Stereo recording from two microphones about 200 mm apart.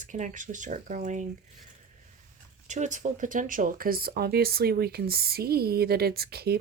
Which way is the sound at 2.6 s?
35° right (ahead or behind).